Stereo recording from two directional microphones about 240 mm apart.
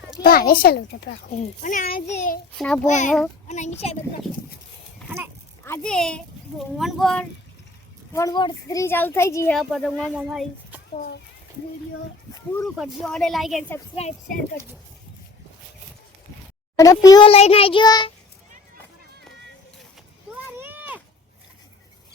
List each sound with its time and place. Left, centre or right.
0.2 s a child's voice: left
2.6 s a child's voice: centre
2.8 s a child's voice: left
5.0 s speech: centre
5.6 s a child's voice: centre
8.1 s a child's voice: centre
9.6 s a child's voice: centre
12.6 s a child's voice: centre
13.9 s a child's voice: left
16.7 s a child's voice: centre
20.3 s a sound: centre